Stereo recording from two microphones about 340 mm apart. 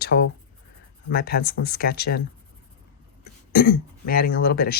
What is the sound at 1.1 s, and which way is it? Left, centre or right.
A woman's voice, left.